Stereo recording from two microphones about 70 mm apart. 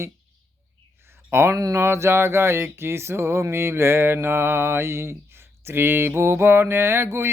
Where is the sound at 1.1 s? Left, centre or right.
Right.